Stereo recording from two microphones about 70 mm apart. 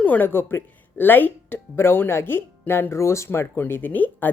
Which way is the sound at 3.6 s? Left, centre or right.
Left.